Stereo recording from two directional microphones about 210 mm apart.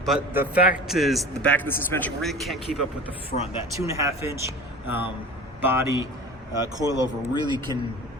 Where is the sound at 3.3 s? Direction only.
40° left (ahead or behind).